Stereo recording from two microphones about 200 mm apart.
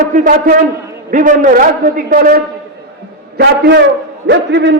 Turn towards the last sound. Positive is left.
turn(degrees=-60)  # may be behind; listen again after turning